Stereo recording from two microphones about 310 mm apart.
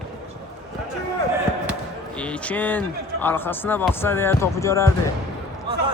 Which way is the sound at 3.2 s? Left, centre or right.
Centre.